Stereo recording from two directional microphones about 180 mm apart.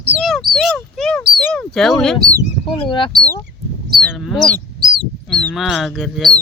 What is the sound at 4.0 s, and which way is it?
Speech, centre (ahead or behind).